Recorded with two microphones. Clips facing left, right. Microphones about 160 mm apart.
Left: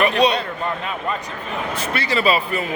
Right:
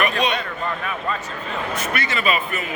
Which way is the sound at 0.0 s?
35° left (ahead or behind).